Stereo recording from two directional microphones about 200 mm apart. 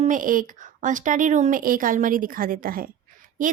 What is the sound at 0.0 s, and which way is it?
A woman's voice, 40° right (ahead or behind).